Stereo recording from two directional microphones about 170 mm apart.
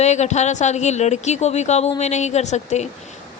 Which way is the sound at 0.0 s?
45° left (ahead or behind).